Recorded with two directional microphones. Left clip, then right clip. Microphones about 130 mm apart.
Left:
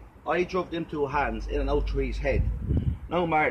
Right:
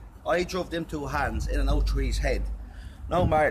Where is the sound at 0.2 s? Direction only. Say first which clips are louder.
Even; 40° right (ahead or behind).